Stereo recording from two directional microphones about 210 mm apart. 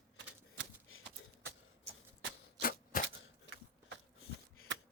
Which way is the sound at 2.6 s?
40° left (ahead or behind).